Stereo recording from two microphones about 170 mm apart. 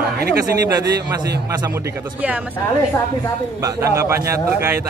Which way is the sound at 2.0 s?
10° right (ahead or behind).